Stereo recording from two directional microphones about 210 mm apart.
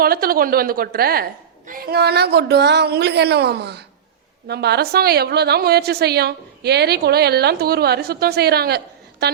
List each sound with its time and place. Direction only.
0.0 s a woman's voice: 45° right (ahead or behind)